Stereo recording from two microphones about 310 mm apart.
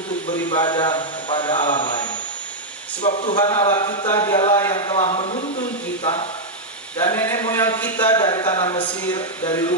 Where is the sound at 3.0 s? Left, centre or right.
Left.